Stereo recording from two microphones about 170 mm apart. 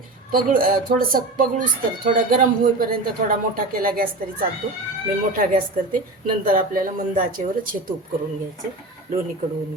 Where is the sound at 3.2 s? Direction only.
55° right (ahead or behind).